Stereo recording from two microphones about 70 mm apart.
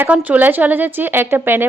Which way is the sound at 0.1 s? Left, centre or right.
Centre.